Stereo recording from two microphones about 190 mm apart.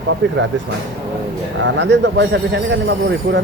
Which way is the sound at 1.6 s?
70° right (ahead or behind).